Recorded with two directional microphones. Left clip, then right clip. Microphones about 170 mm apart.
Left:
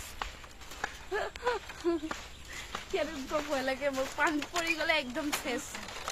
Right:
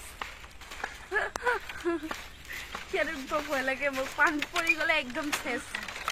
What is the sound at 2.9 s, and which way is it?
Speech, centre (ahead or behind).